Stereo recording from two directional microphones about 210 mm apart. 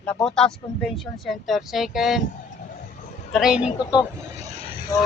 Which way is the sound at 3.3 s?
5° right (ahead or behind).